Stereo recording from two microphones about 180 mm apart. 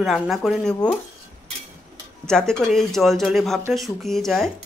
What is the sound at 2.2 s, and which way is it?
Speech, 5° left (ahead or behind).